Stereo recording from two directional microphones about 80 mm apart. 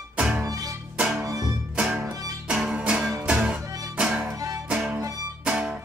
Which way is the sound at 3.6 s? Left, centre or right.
Right.